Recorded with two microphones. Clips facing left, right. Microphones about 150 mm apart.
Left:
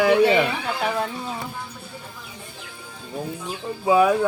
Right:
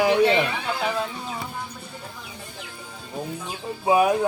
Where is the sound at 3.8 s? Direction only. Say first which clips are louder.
Left 2 dB; 20° right (ahead or behind).